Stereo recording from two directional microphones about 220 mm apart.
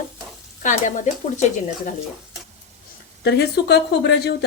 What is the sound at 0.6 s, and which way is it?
Speech, 35° left (ahead or behind).